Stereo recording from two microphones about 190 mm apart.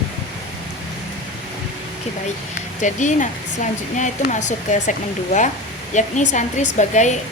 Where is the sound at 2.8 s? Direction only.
40° left (ahead or behind).